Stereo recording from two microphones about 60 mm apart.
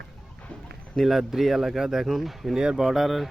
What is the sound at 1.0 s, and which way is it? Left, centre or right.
Speech, centre.